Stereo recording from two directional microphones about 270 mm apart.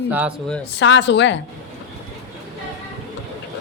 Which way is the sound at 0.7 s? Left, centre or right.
Left.